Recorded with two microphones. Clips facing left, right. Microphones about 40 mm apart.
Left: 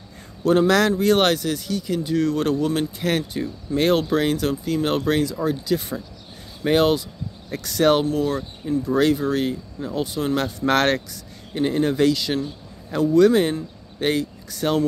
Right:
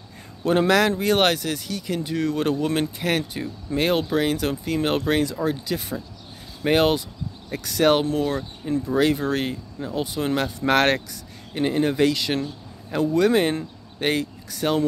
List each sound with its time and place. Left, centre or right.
0.4 s speech: right
4.5 s speech: right
5.7 s speech: centre
6.6 s speech: right
8.0 s speech: right
9.2 s speech: right
9.8 s speech: centre
14.5 s speech: centre